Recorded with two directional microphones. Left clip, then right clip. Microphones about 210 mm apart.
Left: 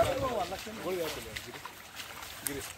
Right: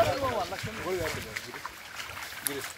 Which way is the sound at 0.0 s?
50° left (ahead or behind).